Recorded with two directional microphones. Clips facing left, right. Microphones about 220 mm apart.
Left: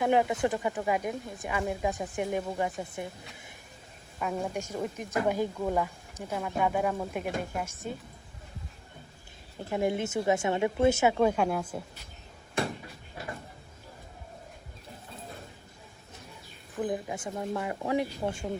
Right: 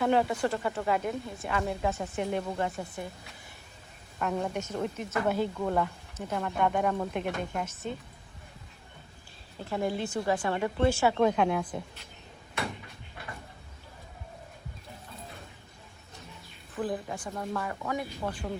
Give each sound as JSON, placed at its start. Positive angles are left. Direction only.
{"t": 0.0, "sound": "speech", "side_deg": 15}
{"t": 4.2, "sound": "speech", "side_deg": 10}
{"t": 9.6, "sound": "speech", "side_deg": 15}
{"t": 11.1, "sound": "speech", "side_deg": 10}
{"t": 16.7, "sound": "speech", "side_deg": 15}